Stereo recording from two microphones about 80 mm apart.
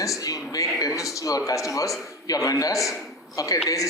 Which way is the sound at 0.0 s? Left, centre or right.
Left.